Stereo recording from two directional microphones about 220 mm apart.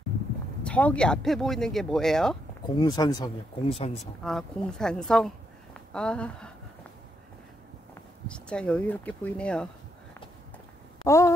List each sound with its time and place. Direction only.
0.7 s speech: 5° left (ahead or behind)
2.8 s speech: 20° left (ahead or behind)
4.0 s speech: centre (ahead or behind)
8.3 s speech: 5° left (ahead or behind)
11.1 s a sound: 15° left (ahead or behind)